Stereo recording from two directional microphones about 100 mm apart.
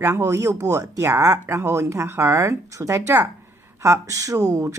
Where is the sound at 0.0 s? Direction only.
30° right (ahead or behind).